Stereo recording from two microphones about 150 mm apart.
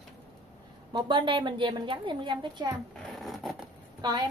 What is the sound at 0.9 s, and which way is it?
A woman's voice, 30° right (ahead or behind).